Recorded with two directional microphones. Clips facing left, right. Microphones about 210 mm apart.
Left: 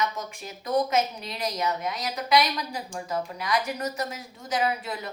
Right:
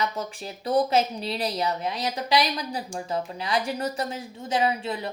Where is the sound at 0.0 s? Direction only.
30° right (ahead or behind).